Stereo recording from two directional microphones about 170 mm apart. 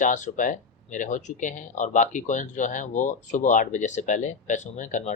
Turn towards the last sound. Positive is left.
turn(degrees=45)  # may be behind; listen again after turning